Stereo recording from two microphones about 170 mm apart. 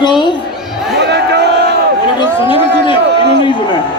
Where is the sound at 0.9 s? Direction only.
80° right.